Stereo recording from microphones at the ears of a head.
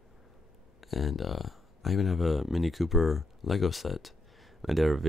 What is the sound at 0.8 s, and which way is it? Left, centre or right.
Speech, left.